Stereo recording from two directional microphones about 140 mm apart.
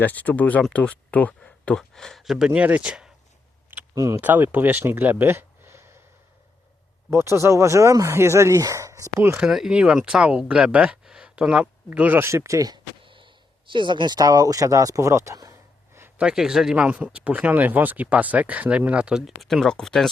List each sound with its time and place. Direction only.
0.0 s speech: 10° left (ahead or behind); by 3.1 s 5° right (ahead or behind)
3.9 s speech: 20° right (ahead or behind)
7.1 s speech: 20° right (ahead or behind)
9.4 s speech: 5° right (ahead or behind); by 15.5 s 25° right (ahead or behind)
16.0 s a sound: 15° right (ahead or behind)
16.2 s speech: 5° right (ahead or behind)